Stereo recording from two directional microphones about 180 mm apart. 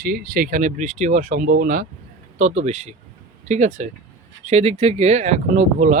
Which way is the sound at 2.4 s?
40° right (ahead or behind).